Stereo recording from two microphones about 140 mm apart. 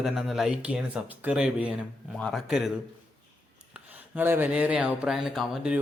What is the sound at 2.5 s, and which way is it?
Speech, centre (ahead or behind).